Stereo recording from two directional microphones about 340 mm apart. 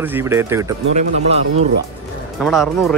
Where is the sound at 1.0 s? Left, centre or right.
Centre.